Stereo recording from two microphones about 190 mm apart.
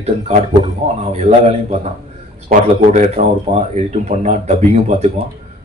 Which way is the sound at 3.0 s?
35° right (ahead or behind).